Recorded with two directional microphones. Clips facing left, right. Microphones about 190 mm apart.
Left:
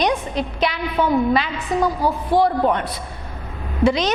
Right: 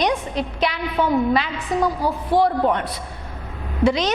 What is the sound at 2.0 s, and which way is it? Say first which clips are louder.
Speech: left 1 dB; 35° left (ahead or behind).